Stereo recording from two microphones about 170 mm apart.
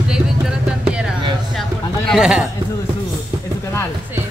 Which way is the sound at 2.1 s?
5° right (ahead or behind).